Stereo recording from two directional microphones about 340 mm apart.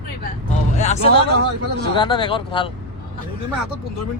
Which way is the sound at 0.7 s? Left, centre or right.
Centre.